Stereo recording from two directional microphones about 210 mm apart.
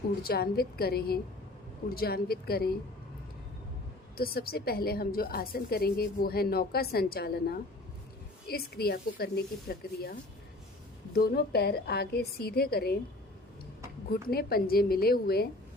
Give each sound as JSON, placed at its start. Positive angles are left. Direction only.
{"t": 0.2, "sound": "a woman's voice", "side_deg": 45}
{"t": 4.2, "sound": "a woman's voice", "side_deg": 45}
{"t": 14.1, "sound": "a woman's voice", "side_deg": 45}